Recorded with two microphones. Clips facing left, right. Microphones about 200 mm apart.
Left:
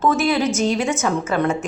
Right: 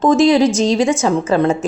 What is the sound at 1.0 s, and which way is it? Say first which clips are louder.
Speech: right 5 dB; 30° right (ahead or behind).